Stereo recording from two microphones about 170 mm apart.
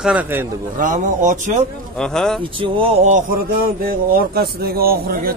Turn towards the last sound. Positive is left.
turn(degrees=-60)  # may be behind; listen again after turning